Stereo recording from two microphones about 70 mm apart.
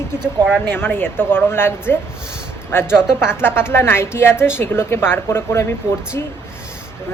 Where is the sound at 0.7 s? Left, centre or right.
Left.